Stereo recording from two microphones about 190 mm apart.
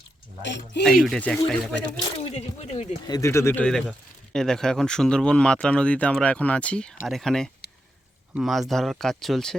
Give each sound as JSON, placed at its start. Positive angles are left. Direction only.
{"t": 0.4, "sound": "speech", "side_deg": 65}
{"t": 1.0, "sound": "speech", "side_deg": 5}
{"t": 2.3, "sound": "speech", "side_deg": 35}
{"t": 3.1, "sound": "speech", "side_deg": 15}